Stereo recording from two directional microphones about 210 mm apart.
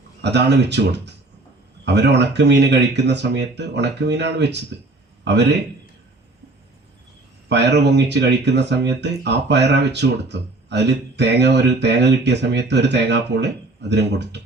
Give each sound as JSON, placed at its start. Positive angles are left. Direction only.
{"t": 0.2, "sound": "a man's voice", "side_deg": -55}
{"t": 7.4, "sound": "speech", "side_deg": -55}